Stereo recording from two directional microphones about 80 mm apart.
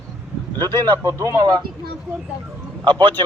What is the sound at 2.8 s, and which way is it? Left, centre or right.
Speech, right.